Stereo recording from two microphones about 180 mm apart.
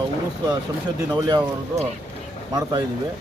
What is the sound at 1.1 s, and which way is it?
Speech, 25° right (ahead or behind).